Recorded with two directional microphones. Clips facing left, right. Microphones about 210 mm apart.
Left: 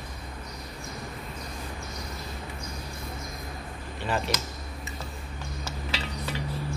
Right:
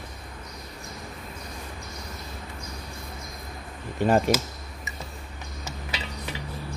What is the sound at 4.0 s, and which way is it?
Speech, 45° right (ahead or behind).